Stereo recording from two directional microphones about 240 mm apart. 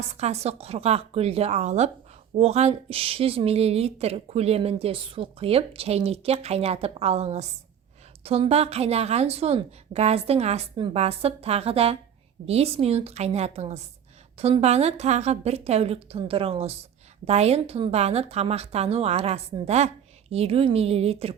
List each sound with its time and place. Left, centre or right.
0.0 s a woman's voice: right